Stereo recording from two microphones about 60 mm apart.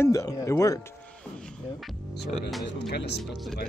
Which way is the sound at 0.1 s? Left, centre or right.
Left.